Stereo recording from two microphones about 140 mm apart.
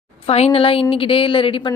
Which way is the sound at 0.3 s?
45° left (ahead or behind).